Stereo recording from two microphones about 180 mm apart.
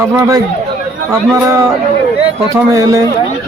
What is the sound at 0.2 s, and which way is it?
Speech, 20° right (ahead or behind).